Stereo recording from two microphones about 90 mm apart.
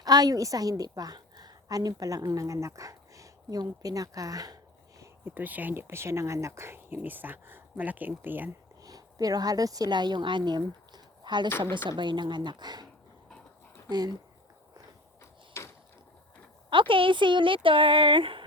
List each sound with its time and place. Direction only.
0.0 s a woman's voice: 45° right (ahead or behind)
5.2 s speech: 20° right (ahead or behind)
8.8 s speech: 40° right (ahead or behind)
15.6 s a sound: 30° left (ahead or behind)
16.6 s speech: 70° right (ahead or behind)